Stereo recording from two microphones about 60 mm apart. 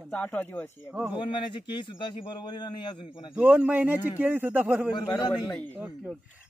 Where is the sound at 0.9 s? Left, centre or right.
Centre.